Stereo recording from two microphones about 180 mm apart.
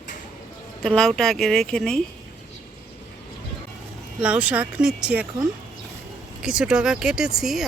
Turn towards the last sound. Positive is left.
turn(degrees=0)  # may be behind; listen again after turning